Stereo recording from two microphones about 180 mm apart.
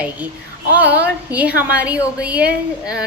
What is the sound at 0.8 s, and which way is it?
Speech, 70° right (ahead or behind).